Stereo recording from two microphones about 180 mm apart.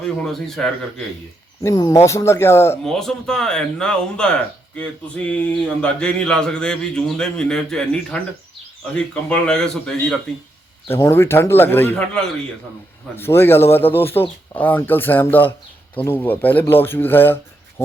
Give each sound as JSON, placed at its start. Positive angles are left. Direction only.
{"t": 0.0, "sound": "speech", "side_deg": 5}
{"t": 1.6, "sound": "speech", "side_deg": 20}
{"t": 2.8, "sound": "speech", "side_deg": 0}
{"t": 10.8, "sound": "speech", "side_deg": 15}